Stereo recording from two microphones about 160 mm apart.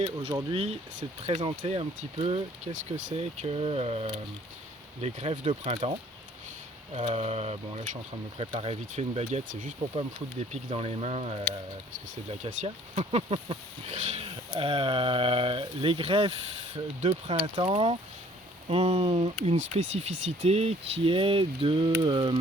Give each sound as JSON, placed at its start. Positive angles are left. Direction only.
{"t": 0.0, "sound": "speech", "side_deg": -35}
{"t": 6.9, "sound": "speech", "side_deg": -40}
{"t": 9.9, "sound": "speech", "side_deg": -35}